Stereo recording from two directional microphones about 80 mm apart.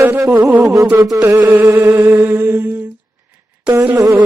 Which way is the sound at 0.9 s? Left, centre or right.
Right.